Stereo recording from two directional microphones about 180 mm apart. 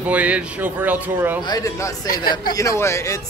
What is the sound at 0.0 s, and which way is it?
Speech, 10° right (ahead or behind).